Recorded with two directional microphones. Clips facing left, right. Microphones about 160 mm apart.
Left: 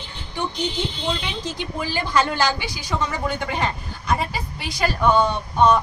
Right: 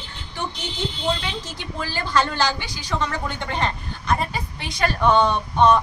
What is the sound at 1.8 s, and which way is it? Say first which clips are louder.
A woman's voice: left 1 dB; 15° left (ahead or behind).